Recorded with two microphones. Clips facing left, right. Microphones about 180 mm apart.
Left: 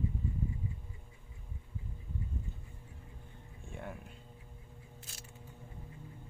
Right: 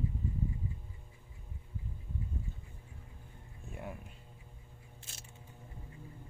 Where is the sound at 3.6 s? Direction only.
5° right (ahead or behind).